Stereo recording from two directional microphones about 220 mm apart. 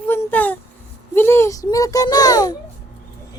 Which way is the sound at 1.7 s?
15° left (ahead or behind).